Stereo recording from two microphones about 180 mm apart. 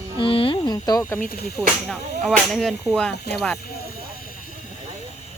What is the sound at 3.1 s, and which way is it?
Speech, 65° left (ahead or behind).